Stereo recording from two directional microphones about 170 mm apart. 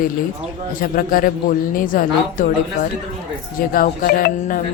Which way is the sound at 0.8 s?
55° left (ahead or behind).